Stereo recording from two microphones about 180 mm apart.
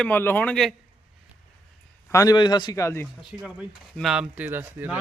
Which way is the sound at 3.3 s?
5° right (ahead or behind).